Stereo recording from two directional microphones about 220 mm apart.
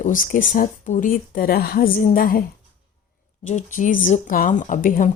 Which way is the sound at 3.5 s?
35° left (ahead or behind).